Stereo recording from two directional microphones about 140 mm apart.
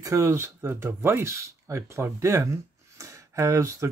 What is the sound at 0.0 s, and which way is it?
Speech, 25° right (ahead or behind).